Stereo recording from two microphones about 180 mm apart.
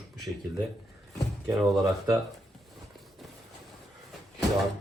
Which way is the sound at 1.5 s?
5° right (ahead or behind).